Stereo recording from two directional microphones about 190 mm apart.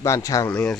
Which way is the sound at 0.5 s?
5° left (ahead or behind).